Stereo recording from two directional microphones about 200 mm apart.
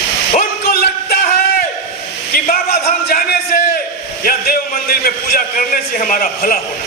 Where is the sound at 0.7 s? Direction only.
50° left (ahead or behind).